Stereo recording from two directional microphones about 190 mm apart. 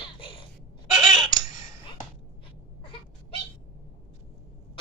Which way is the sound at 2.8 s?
25° left (ahead or behind).